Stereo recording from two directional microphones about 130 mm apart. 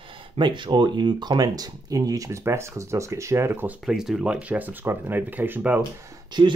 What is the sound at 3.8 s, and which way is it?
Speech, 5° right (ahead or behind).